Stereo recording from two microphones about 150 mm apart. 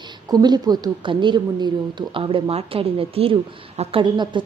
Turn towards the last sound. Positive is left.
turn(degrees=-30)  # may be behind; listen again after turning